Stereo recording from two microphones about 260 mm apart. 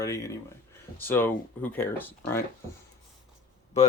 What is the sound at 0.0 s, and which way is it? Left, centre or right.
Speech, centre.